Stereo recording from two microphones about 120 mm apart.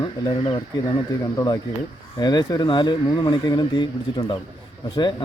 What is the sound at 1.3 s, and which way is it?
Speech, 35° left (ahead or behind).